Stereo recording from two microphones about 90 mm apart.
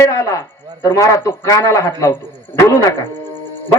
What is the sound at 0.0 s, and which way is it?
A man's voice, 35° left (ahead or behind).